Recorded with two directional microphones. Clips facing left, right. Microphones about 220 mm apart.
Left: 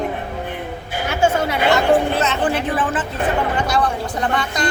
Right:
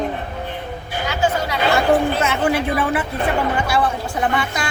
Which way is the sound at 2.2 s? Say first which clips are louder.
Right 1 dB; 10° right (ahead or behind).